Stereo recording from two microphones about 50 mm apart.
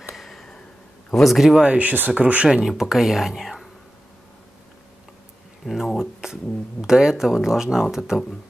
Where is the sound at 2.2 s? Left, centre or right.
Right.